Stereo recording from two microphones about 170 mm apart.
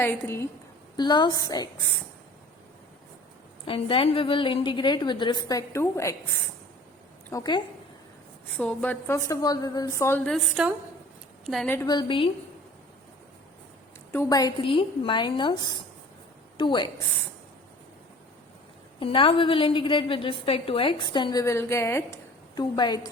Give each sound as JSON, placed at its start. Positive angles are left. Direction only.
{"t": 0.0, "sound": "a woman's voice", "side_deg": 15}
{"t": 0.9, "sound": "a woman's voice", "side_deg": 25}
{"t": 3.7, "sound": "a woman's voice", "side_deg": 30}
{"t": 7.3, "sound": "a woman's voice", "side_deg": 20}
{"t": 8.5, "sound": "a woman's voice", "side_deg": 10}
{"t": 11.9, "sound": "a woman's voice", "side_deg": 30}
{"t": 14.1, "sound": "a woman's voice", "side_deg": 20}
{"t": 18.9, "sound": "a woman's voice", "side_deg": 30}